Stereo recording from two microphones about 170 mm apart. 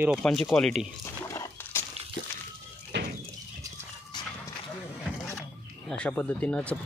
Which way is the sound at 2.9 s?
85° right.